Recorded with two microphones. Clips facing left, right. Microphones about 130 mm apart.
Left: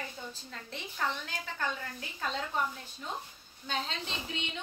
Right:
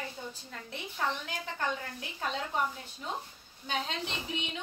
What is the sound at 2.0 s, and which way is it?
Speech, 10° right (ahead or behind).